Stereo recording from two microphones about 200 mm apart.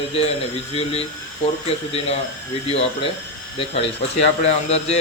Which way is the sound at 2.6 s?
30° left (ahead or behind).